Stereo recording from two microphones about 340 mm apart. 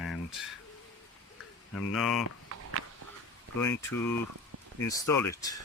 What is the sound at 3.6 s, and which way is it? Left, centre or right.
Speech, centre.